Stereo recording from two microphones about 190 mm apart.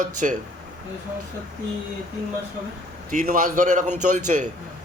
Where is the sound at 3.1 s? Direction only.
45° right (ahead or behind).